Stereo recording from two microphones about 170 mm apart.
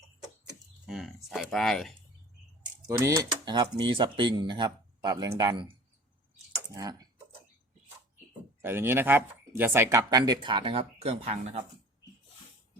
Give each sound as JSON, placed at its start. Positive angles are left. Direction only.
{"t": 0.9, "sound": "speech", "side_deg": 0}
{"t": 2.8, "sound": "speech", "side_deg": -20}
{"t": 6.7, "sound": "speech", "side_deg": -25}
{"t": 8.6, "sound": "speech", "side_deg": -15}